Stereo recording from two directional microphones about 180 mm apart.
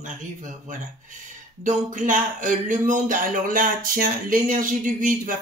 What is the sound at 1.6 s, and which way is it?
Speech, 45° right (ahead or behind).